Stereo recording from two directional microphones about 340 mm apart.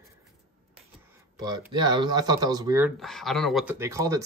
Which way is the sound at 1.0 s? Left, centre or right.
Centre.